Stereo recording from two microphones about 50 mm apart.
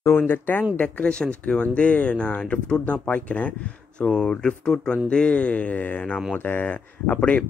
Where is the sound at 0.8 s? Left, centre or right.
Left.